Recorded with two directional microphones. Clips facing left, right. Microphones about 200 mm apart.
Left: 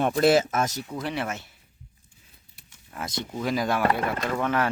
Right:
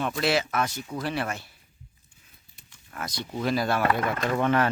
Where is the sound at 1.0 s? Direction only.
20° left (ahead or behind).